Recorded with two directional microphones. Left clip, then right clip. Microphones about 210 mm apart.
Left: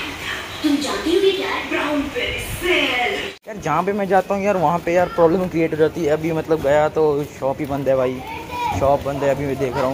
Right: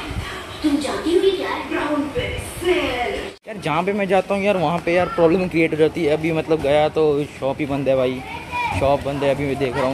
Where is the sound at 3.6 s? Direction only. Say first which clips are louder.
Left 1 dB; 15° right (ahead or behind).